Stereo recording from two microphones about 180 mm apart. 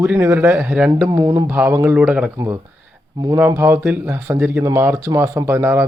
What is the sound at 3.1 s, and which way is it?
Speech, 20° right (ahead or behind).